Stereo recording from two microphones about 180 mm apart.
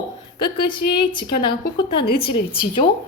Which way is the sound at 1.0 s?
25° left (ahead or behind).